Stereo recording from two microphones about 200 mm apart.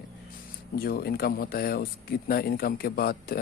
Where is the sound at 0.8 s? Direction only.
50° left (ahead or behind).